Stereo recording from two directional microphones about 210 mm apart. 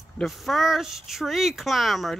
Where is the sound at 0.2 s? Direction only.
Centre (ahead or behind).